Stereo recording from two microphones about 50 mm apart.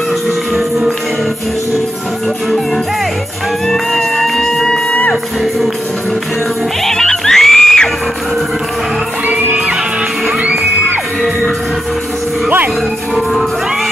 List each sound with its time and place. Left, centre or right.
0.6 s music: centre
3.6 s music: centre
6.8 s music: centre
9.3 s music: right
13.1 s music: centre